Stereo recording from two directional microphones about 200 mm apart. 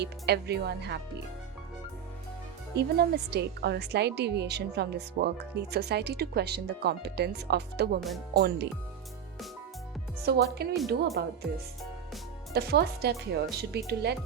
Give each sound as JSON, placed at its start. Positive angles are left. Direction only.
{"t": 0.0, "sound": "speech", "side_deg": -55}
{"t": 2.7, "sound": "speech", "side_deg": -55}
{"t": 10.2, "sound": "a woman's voice", "side_deg": -55}
{"t": 12.5, "sound": "speech", "side_deg": -55}